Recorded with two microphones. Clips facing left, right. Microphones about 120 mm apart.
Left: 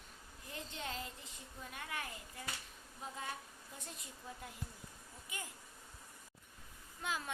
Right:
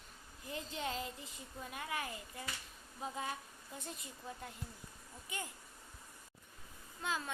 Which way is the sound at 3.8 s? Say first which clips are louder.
Right 4 dB; centre (ahead or behind).